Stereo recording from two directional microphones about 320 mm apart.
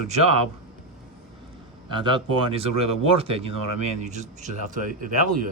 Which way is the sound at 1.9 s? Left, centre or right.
Centre.